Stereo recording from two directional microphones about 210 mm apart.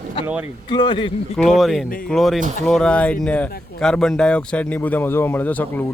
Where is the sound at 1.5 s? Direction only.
Centre (ahead or behind).